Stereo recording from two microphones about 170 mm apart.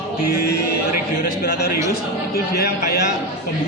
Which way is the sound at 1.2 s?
70° left (ahead or behind).